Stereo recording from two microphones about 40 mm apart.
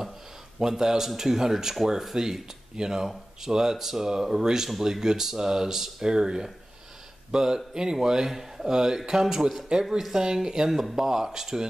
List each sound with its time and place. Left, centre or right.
0.6 s speech: centre